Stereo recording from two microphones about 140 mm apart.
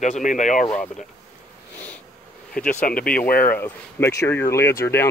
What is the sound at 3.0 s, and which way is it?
Speech, 90° left.